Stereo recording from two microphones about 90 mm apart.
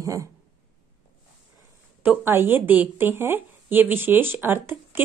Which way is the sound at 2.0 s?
25° right (ahead or behind).